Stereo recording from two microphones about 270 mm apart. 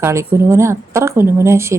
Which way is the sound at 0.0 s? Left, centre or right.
Centre.